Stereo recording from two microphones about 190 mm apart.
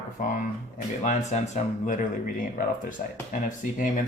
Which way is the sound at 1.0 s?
40° left (ahead or behind).